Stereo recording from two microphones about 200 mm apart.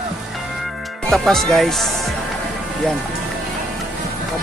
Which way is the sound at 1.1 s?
Centre (ahead or behind).